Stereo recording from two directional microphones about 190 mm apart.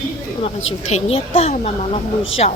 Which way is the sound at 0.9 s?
35° left (ahead or behind).